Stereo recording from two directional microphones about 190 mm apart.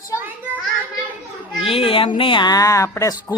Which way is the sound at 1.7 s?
30° left (ahead or behind).